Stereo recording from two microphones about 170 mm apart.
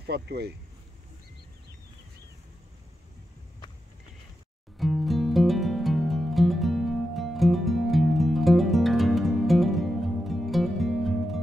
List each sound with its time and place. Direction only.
0.0 s speech: 75° right (ahead or behind)
4.7 s music: centre (ahead or behind)